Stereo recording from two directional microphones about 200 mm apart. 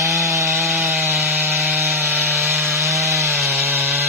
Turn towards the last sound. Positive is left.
turn(degrees=-10)  # may be behind; listen again after turning